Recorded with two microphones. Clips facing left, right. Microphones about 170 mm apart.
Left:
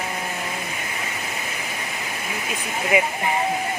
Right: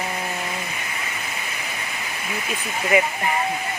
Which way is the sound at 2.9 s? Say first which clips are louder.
Right 1 dB; 10° left (ahead or behind).